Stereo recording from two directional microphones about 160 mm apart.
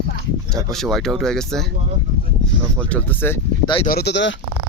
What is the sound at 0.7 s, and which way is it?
Speech, centre (ahead or behind).